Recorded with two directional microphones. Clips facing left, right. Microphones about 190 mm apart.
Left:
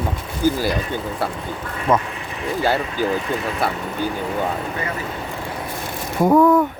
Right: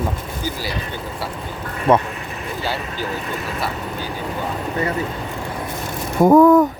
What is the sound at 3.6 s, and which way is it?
Speech, 55° left (ahead or behind).